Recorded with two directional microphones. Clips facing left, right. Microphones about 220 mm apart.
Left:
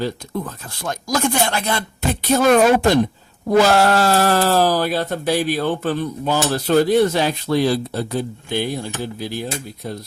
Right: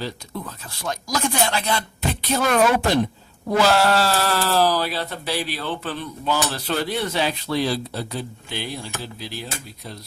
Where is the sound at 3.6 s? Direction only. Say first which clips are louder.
Left 4 dB; 45° left (ahead or behind).